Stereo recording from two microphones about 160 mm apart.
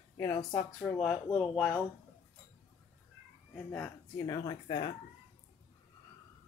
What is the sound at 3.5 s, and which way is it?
Speech, 10° left (ahead or behind).